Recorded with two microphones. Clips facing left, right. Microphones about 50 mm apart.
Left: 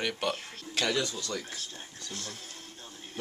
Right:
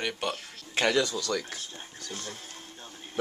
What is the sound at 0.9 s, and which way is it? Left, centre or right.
Speech, right.